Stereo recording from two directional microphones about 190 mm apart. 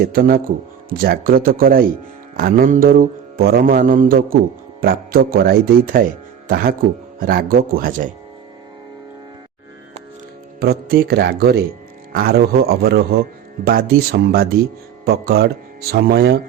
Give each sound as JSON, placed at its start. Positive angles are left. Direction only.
{"t": 0.0, "sound": "mantra", "side_deg": -50}
{"t": 10.6, "sound": "mantra", "side_deg": -50}
{"t": 12.1, "sound": "a man's voice", "side_deg": -50}
{"t": 13.7, "sound": "mantra", "side_deg": -50}
{"t": 15.0, "sound": "a man's voice", "side_deg": -55}
{"t": 15.9, "sound": "mantra", "side_deg": -55}